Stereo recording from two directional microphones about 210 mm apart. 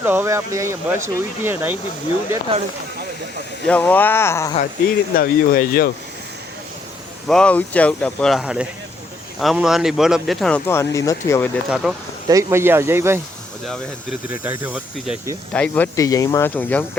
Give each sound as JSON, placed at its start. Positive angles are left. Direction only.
{"t": 0.0, "sound": "speech", "side_deg": -10}
{"t": 3.7, "sound": "speech", "side_deg": 10}
{"t": 5.1, "sound": "speech", "side_deg": 45}
{"t": 7.3, "sound": "speech", "side_deg": 5}
{"t": 11.7, "sound": "speech", "side_deg": -5}
{"t": 12.3, "sound": "speech", "side_deg": -15}
{"t": 14.4, "sound": "speech", "side_deg": -5}
{"t": 15.5, "sound": "speech", "side_deg": 5}